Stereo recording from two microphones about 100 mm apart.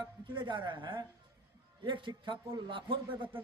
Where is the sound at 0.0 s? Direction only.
50° right (ahead or behind).